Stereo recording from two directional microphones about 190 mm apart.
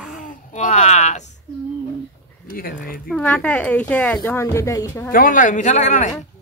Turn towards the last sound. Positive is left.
turn(degrees=40)  # may be behind; listen again after turning